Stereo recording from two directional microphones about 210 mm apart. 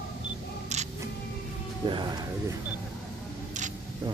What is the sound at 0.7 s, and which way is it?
Camera, 30° right (ahead or behind).